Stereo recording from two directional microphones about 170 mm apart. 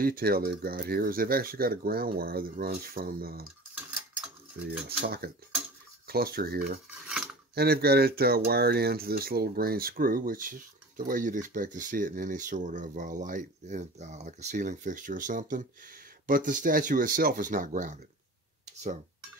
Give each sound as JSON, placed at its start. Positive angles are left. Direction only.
{"t": 0.0, "sound": "speech", "side_deg": -60}
{"t": 4.8, "sound": "speech", "side_deg": -70}